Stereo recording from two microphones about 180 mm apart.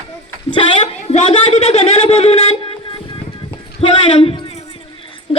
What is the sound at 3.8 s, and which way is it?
Speech, 30° left (ahead or behind).